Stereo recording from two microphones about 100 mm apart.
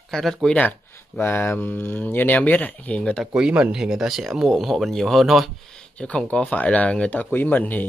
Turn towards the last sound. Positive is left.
turn(degrees=15)  # may be behind; listen again after turning